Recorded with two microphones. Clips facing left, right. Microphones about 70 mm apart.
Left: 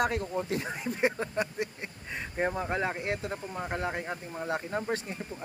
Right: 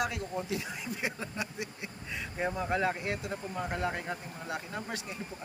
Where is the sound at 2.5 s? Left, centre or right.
Left.